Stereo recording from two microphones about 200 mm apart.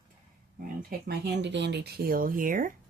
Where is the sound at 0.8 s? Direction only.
50° right (ahead or behind).